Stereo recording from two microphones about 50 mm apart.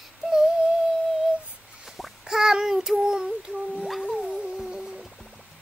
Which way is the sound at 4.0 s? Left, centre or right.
Centre.